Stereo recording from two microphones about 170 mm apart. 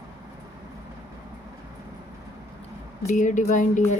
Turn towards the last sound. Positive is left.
turn(degrees=45)  # may be behind; listen again after turning